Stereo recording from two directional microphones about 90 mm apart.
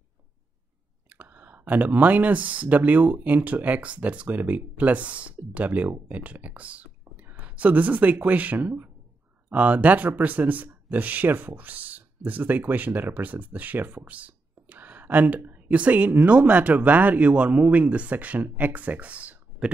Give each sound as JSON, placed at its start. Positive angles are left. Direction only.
{"t": 1.0, "sound": "speech", "side_deg": -20}